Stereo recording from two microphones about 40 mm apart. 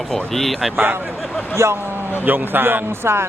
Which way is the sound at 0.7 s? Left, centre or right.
Right.